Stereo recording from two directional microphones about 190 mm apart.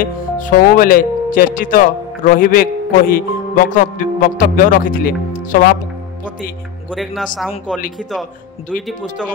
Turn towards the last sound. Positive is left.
turn(degrees=0)  # may be behind; listen again after turning